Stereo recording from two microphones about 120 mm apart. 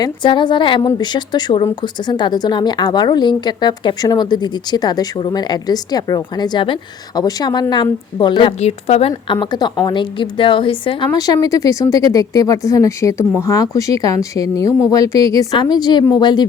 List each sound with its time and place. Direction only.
0.0 s speech: 40° left (ahead or behind)
0.8 s speech: 30° left (ahead or behind)
8.6 s a woman's voice: 55° left (ahead or behind)
11.1 s speech: 30° left (ahead or behind)